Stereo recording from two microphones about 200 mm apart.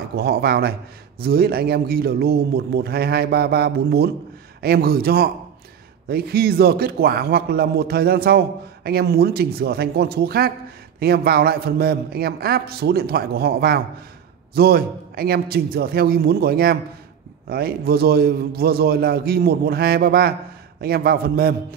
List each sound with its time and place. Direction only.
0.1 s a man's voice: 50° right (ahead or behind)